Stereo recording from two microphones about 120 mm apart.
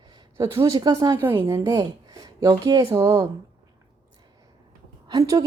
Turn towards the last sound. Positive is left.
turn(degrees=-30)  # may be behind; listen again after turning